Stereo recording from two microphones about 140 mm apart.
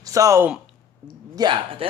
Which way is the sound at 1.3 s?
30° right (ahead or behind).